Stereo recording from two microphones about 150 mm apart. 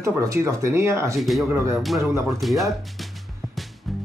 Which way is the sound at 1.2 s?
Centre (ahead or behind).